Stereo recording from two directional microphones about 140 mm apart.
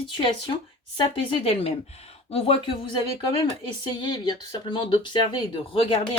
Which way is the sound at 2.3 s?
40° left (ahead or behind).